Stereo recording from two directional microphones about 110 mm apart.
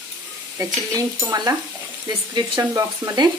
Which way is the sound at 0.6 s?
25° right (ahead or behind).